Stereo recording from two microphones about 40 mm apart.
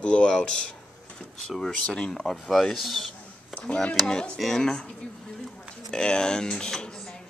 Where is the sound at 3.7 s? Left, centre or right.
Left.